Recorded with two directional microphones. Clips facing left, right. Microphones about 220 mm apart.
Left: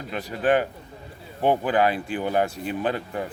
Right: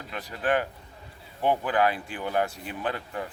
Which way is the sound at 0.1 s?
25° left (ahead or behind).